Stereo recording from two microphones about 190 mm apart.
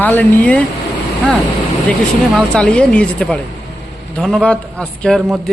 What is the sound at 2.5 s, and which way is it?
A man's voice, 5° left (ahead or behind).